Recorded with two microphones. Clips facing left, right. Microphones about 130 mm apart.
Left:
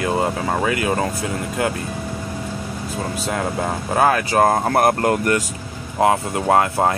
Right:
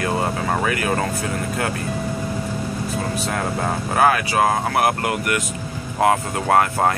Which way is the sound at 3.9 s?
35° left (ahead or behind).